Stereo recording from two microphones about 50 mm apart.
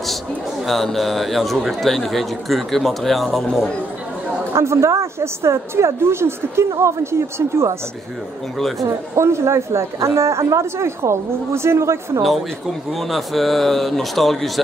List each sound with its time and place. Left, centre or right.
0.7 s a man's voice: centre
4.6 s a woman's voice: right
8.5 s a man's voice: centre
8.8 s a woman's voice: right
12.2 s a man's voice: centre